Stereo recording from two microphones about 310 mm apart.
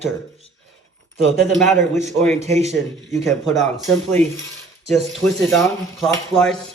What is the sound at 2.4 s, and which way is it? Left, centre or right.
Speech, right.